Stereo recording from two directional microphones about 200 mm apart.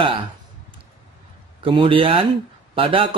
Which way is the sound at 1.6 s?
25° right (ahead or behind).